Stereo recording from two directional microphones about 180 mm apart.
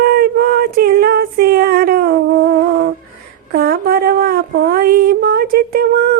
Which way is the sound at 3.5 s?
55° right (ahead or behind).